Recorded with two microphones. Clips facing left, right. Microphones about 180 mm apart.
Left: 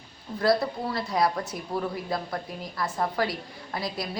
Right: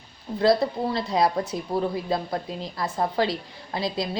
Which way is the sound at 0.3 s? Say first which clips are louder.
Right 3 dB; 25° right (ahead or behind).